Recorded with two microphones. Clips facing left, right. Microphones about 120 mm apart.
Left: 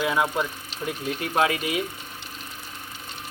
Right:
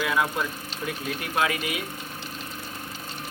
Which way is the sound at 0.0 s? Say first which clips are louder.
Left 2 dB; 20° left (ahead or behind).